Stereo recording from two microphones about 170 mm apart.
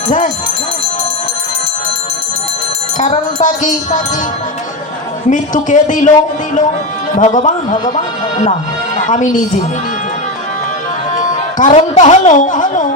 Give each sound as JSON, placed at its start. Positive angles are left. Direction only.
{"t": 3.4, "sound": "speech", "side_deg": 50}
{"t": 5.3, "sound": "speech", "side_deg": 50}
{"t": 11.1, "sound": "music", "side_deg": 50}
{"t": 11.8, "sound": "speech", "side_deg": 45}